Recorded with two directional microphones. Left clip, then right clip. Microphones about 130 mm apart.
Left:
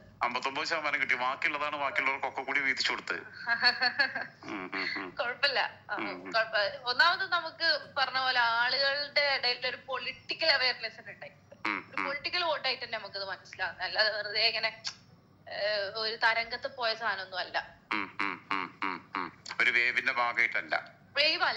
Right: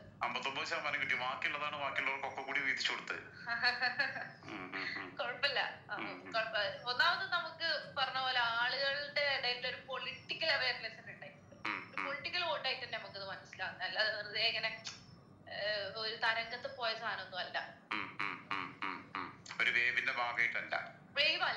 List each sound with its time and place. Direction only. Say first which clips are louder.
0.2 s a man's voice: left 6 dB; 40° left (ahead or behind)